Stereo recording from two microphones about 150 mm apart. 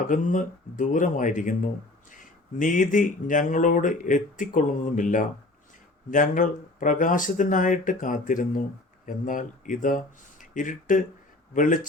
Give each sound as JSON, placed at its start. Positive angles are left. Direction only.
{"t": 0.1, "sound": "speech", "side_deg": 55}